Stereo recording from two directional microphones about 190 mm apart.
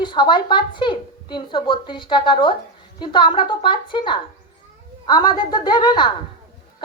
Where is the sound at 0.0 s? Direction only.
25° left (ahead or behind).